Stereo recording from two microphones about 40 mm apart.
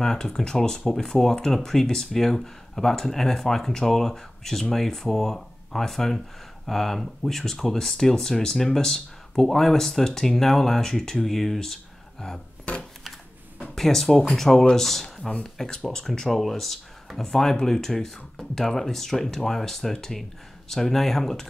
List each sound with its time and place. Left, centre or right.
0.0 s speech: centre
13.7 s speech: centre
16.3 s speech: centre